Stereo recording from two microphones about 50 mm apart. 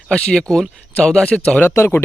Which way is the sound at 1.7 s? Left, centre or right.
Left.